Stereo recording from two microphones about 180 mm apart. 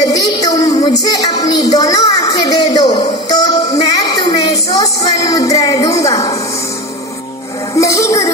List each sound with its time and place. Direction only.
0.0 s music: 20° left (ahead or behind)
7.8 s music: 15° left (ahead or behind)